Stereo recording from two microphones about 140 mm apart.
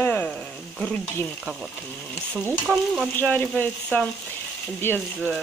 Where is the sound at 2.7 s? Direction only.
10° left (ahead or behind).